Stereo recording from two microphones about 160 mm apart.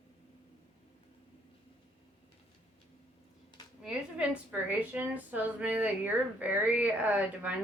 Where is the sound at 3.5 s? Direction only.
30° left (ahead or behind).